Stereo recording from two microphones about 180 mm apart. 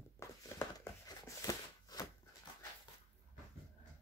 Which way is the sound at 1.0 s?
20° left (ahead or behind).